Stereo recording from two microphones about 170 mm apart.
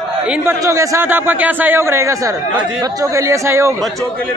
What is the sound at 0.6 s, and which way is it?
A man's voice, 20° right (ahead or behind).